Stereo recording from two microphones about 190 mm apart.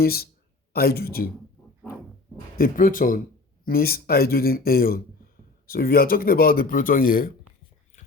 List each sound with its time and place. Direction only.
0.0 s speech: 55° left (ahead or behind)
2.6 s speech: 45° left (ahead or behind)